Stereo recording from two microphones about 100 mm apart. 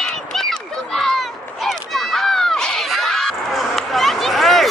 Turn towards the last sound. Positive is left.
turn(degrees=0)  # may be behind; listen again after turning